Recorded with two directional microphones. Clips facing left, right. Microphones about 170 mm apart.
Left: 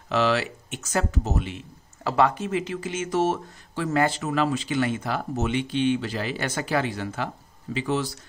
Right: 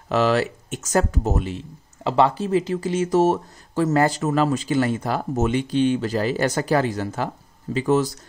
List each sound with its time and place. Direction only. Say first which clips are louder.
0.1 s speech: right 4 dB; 45° right (ahead or behind)